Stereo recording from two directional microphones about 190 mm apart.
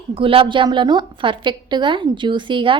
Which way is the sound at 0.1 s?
30° right (ahead or behind).